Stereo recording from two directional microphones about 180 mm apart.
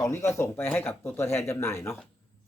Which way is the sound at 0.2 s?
15° left (ahead or behind).